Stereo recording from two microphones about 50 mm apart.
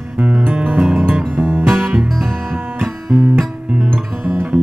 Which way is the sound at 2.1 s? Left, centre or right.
Centre.